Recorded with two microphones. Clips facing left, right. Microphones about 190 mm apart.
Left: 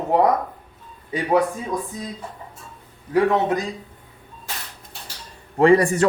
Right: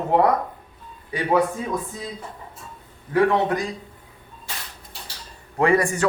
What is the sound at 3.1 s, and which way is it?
Speech, 20° left (ahead or behind).